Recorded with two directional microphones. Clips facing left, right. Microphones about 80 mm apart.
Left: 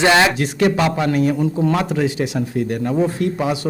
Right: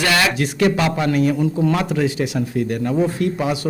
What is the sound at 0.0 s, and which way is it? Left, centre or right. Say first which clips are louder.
A man's voice: left 4 dB; left.